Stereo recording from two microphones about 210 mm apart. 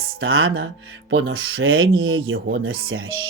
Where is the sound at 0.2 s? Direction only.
75° right (ahead or behind).